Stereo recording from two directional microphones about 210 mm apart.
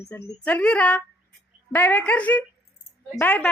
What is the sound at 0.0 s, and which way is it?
Speech, 10° left (ahead or behind).